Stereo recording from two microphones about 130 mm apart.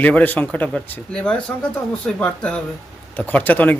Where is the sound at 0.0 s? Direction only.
10° left (ahead or behind).